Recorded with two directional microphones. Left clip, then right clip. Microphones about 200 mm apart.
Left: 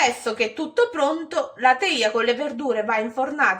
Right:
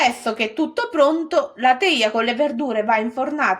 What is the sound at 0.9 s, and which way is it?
A woman's voice, 45° right (ahead or behind).